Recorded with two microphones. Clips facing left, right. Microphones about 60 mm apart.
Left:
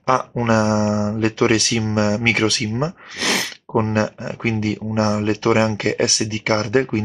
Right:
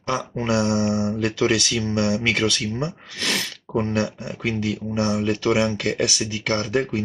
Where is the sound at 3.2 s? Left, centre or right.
Left.